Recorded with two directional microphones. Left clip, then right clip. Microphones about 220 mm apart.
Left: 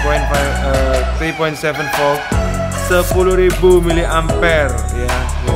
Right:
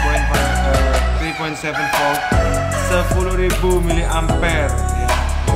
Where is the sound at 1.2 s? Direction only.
45° left (ahead or behind).